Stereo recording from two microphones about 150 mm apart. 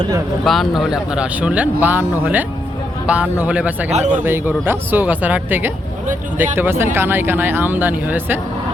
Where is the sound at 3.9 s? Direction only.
50° right (ahead or behind).